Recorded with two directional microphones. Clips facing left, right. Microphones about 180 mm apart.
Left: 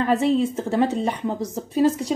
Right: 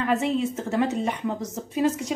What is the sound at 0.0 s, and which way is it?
Speech, 35° left (ahead or behind).